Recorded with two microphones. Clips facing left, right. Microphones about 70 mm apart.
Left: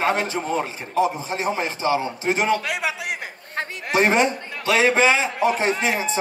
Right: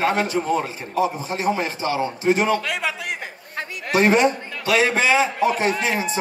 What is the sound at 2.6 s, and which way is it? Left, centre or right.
Speech, centre.